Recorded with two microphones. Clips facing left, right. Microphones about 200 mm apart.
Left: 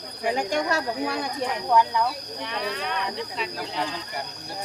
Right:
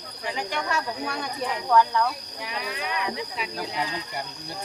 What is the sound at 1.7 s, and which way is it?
Speech, 15° left (ahead or behind).